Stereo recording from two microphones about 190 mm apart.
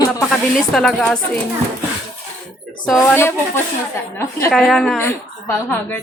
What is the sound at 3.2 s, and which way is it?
Speech, 10° left (ahead or behind).